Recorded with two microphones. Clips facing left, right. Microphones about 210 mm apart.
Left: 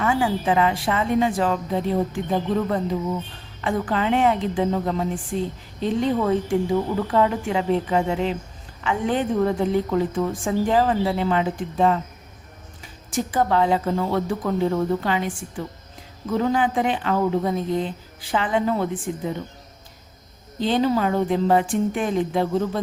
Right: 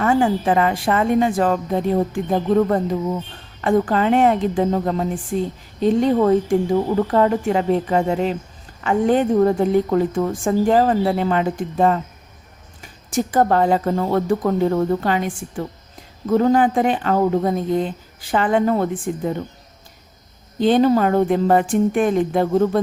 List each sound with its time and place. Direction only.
0.0 s a woman's voice: 45° right (ahead or behind)
13.1 s a woman's voice: 45° right (ahead or behind)
20.6 s a woman's voice: 50° right (ahead or behind)